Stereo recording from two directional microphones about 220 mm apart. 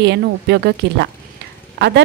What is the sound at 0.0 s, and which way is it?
A woman's voice, 50° right (ahead or behind).